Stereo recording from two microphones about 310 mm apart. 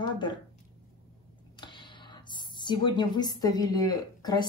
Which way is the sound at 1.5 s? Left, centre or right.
Centre.